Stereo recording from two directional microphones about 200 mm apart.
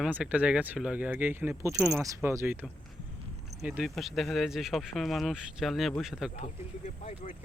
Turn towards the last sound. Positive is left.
turn(degrees=35)  # may be behind; listen again after turning